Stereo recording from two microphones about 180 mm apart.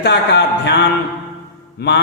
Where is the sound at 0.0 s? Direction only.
70° left (ahead or behind).